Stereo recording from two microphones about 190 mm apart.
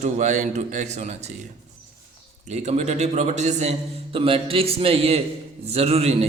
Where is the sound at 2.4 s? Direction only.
35° right (ahead or behind).